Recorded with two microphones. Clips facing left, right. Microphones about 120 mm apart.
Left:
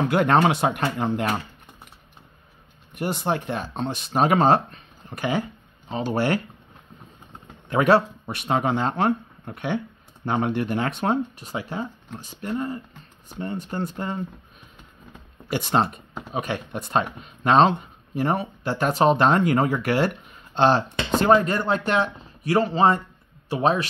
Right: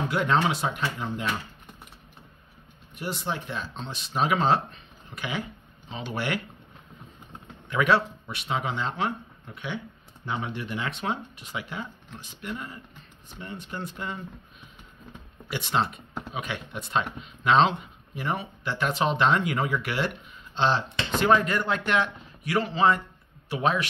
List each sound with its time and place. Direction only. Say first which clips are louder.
0.1 s speech: left 5 dB; 55° left (ahead or behind)
2.9 s speech: left 7 dB; 55° left (ahead or behind)
7.7 s speech: left 5 dB; 40° left (ahead or behind)
15.5 s speech: left 5 dB; 45° left (ahead or behind)